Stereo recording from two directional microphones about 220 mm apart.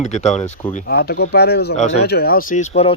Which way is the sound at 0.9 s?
45° left (ahead or behind).